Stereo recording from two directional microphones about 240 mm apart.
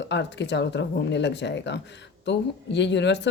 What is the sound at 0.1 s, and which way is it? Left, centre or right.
Speech, left.